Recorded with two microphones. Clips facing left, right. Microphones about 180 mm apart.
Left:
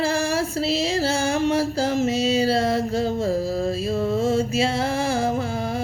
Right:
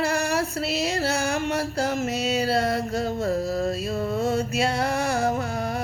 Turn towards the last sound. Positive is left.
turn(degrees=30)  # may be behind; listen again after turning